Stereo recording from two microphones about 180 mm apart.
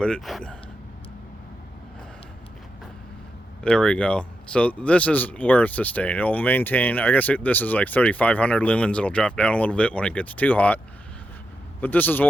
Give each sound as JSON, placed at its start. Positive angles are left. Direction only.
{"t": 0.0, "sound": "speech", "side_deg": 5}
{"t": 3.6, "sound": "speech", "side_deg": 5}
{"t": 11.8, "sound": "speech", "side_deg": 10}